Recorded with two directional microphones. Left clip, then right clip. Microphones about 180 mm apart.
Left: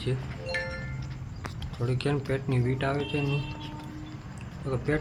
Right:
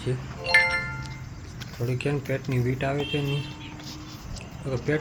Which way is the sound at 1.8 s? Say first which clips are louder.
Right 1 dB; 5° right (ahead or behind).